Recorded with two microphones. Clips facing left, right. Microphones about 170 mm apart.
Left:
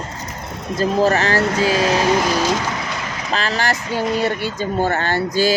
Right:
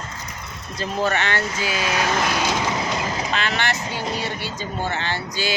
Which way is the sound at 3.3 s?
35° left (ahead or behind).